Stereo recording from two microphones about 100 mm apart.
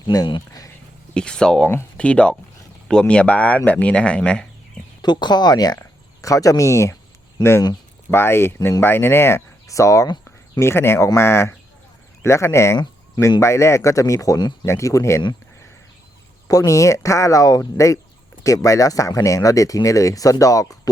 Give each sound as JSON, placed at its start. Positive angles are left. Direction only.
{"t": 0.1, "sound": "speech", "side_deg": 45}
{"t": 1.1, "sound": "speech", "side_deg": 10}
{"t": 5.0, "sound": "speech", "side_deg": 45}
{"t": 8.1, "sound": "speech", "side_deg": 25}
{"t": 16.5, "sound": "speech", "side_deg": 35}